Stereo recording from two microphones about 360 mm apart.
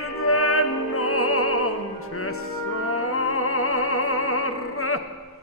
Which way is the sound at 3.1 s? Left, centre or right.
Left.